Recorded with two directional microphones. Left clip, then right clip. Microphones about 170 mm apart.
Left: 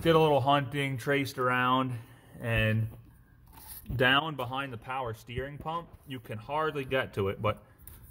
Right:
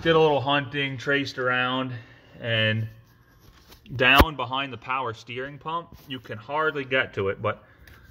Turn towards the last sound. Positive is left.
turn(degrees=15)  # may be behind; listen again after turning